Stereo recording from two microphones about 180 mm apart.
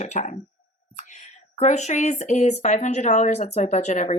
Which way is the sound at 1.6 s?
40° left (ahead or behind).